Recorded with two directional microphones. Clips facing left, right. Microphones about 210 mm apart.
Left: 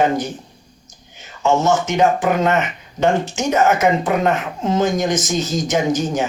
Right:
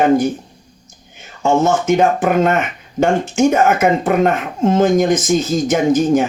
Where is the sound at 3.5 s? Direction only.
50° right (ahead or behind).